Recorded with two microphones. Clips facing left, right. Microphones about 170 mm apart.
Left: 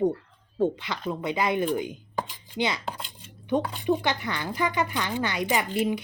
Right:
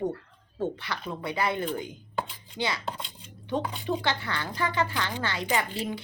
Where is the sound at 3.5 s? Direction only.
15° left (ahead or behind).